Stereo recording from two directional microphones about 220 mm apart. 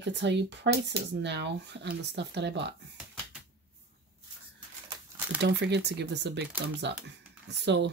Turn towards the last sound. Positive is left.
turn(degrees=-50)  # may be behind; listen again after turning